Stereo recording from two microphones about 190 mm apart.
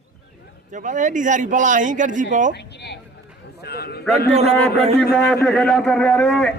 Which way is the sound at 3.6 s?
55° left (ahead or behind).